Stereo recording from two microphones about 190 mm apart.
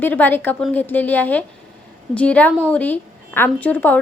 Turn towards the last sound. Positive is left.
turn(degrees=10)  # may be behind; listen again after turning